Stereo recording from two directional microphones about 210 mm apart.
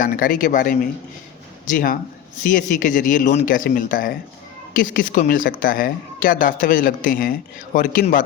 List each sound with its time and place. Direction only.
0.0 s a woman's voice: 40° left (ahead or behind)